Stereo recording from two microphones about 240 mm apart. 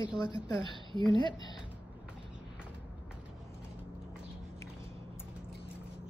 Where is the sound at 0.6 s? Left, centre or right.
Right.